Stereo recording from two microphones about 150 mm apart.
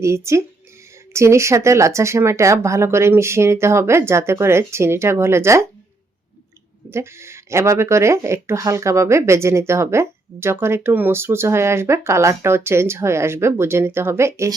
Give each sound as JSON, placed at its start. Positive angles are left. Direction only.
{"t": 0.0, "sound": "speech", "side_deg": -20}
{"t": 6.9, "sound": "speech", "side_deg": -15}